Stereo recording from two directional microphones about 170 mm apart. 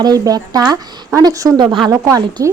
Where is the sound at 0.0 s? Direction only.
20° right (ahead or behind).